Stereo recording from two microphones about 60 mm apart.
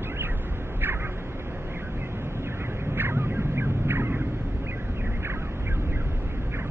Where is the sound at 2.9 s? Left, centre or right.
Right.